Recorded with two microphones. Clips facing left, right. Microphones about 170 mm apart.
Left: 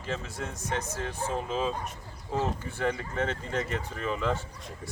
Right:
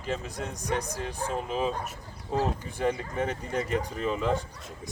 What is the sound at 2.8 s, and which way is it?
Speech, 15° right (ahead or behind).